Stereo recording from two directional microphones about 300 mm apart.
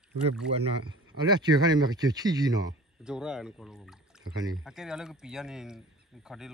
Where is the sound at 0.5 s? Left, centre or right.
Centre.